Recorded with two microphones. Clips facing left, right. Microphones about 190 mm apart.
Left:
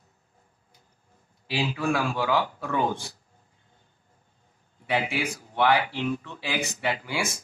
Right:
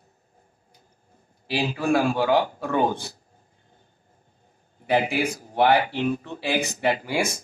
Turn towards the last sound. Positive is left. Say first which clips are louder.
# right 5 dB
turn(degrees=-35)  # may be behind; listen again after turning